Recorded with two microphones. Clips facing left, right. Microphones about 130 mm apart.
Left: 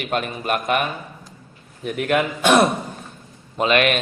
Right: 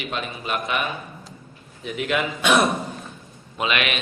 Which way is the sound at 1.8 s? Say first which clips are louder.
Left 4 dB; 50° left (ahead or behind).